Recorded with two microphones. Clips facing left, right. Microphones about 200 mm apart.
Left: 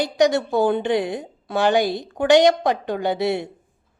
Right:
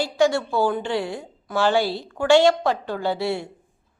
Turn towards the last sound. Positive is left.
turn(degrees=20)  # may be behind; listen again after turning